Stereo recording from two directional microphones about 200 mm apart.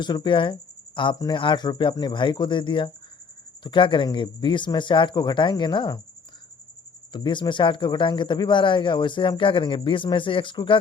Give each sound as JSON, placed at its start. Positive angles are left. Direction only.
{"t": 0.0, "sound": "a man's voice", "side_deg": 20}
{"t": 7.1, "sound": "a man's voice", "side_deg": 25}